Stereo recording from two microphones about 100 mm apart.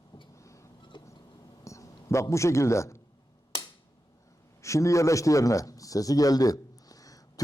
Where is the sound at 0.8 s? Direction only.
50° left (ahead or behind).